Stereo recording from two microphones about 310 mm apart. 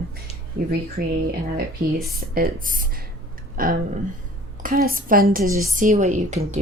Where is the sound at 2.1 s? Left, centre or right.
Right.